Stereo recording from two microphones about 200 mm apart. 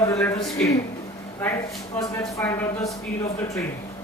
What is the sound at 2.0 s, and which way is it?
Speech, 15° left (ahead or behind).